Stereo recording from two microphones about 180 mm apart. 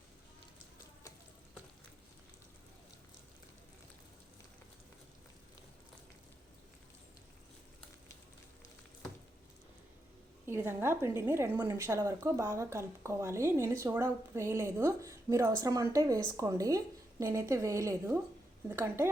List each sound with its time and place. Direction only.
10.4 s a woman's voice: 15° right (ahead or behind)